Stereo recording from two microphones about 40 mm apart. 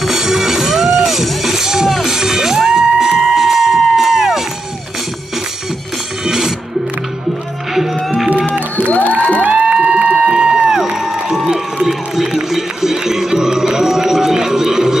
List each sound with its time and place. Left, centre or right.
0.0 s music: centre
6.2 s music: centre
8.7 s music: left
9.4 s music: right
10.7 s crowd: centre
12.3 s music: centre